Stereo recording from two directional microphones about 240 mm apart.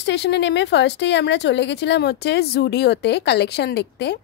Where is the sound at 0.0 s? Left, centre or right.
Left.